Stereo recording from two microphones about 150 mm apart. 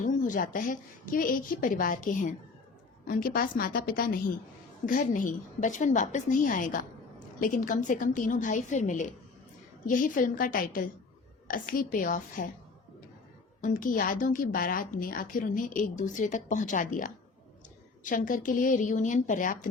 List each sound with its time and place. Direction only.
0.0 s speech: 60° left (ahead or behind)
3.1 s a woman's voice: 70° left (ahead or behind)
4.9 s a woman's voice: 65° left (ahead or behind)
13.6 s speech: 60° left (ahead or behind)